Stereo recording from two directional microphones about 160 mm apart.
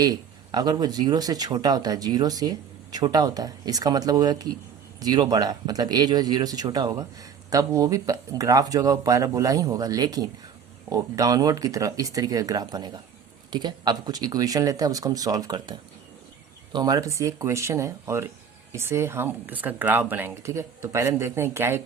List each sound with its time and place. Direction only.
0.0 s speech: 25° right (ahead or behind)
16.7 s speech: 25° right (ahead or behind)